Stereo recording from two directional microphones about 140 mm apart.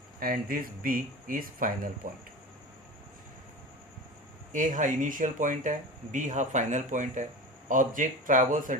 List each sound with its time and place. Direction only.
0.2 s speech: 90° right
4.5 s speech: 65° right (ahead or behind)